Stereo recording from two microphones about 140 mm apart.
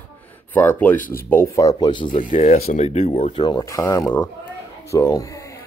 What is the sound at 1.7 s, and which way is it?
Speech, 35° left (ahead or behind).